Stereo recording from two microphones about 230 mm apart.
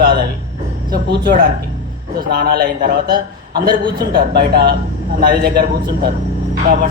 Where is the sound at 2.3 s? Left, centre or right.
Right.